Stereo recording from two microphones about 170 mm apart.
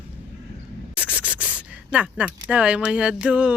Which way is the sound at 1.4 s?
10° right (ahead or behind).